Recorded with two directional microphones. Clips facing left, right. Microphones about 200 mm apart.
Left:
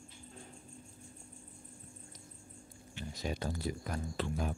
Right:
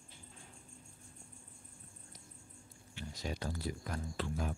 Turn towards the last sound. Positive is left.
turn(degrees=20)  # may be behind; listen again after turning